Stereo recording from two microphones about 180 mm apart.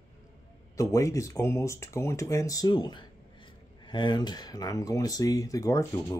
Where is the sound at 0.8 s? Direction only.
15° left (ahead or behind).